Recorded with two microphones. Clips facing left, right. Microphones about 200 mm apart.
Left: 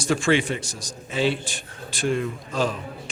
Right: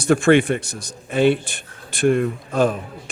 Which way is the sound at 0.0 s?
60° right (ahead or behind).